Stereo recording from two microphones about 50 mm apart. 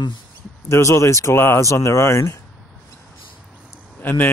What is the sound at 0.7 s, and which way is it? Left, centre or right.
Speech, left.